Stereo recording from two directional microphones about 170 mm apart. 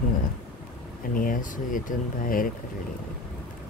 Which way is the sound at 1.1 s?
55° left (ahead or behind).